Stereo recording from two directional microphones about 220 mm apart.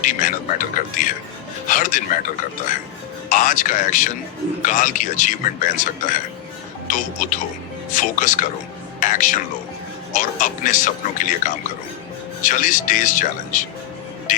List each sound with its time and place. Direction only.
0.0 s a man's voice: 35° left (ahead or behind)
3.2 s a man's voice: 35° left (ahead or behind)
14.3 s music: 35° left (ahead or behind)